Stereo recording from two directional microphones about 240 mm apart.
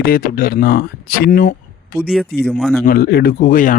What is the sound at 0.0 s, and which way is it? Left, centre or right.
Speech, left.